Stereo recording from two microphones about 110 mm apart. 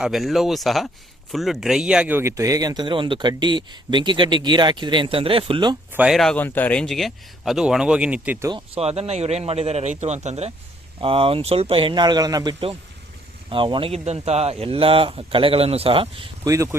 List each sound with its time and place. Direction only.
0.0 s speech: centre (ahead or behind)
2.1 s speech: 25° right (ahead or behind); by 5.7 s 45° right (ahead or behind)
6.1 s speech: centre (ahead or behind)
6.3 s speech: 15° left (ahead or behind)
6.8 s speech: centre (ahead or behind)
8.5 s a man's voice: 65° right (ahead or behind); by 10.5 s 80° right
11.0 s speech: 55° right (ahead or behind); by 12.5 s 35° right (ahead or behind)
13.5 s speech: 50° right (ahead or behind)
16.4 s a man's voice: 30° right (ahead or behind)